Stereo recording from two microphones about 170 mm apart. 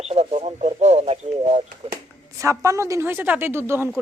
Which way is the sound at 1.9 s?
20° right (ahead or behind).